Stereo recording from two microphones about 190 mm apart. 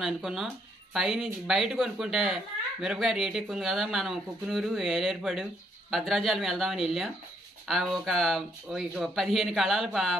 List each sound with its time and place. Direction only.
0.0 s a child's voice: centre (ahead or behind)